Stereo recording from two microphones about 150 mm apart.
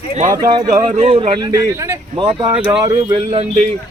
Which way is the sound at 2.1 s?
30° right (ahead or behind).